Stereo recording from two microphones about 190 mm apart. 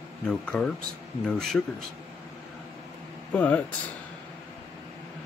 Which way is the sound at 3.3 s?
10° left (ahead or behind).